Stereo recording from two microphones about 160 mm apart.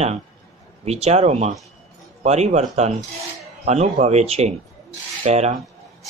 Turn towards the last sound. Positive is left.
turn(degrees=-45)  # may be behind; listen again after turning